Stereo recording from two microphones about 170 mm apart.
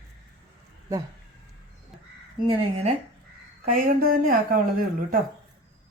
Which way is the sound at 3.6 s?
55° right (ahead or behind).